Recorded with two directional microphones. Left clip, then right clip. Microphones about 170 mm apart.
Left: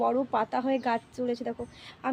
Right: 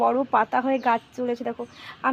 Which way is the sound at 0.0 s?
25° right (ahead or behind).